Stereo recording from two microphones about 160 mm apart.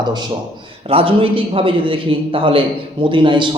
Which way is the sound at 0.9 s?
35° right (ahead or behind).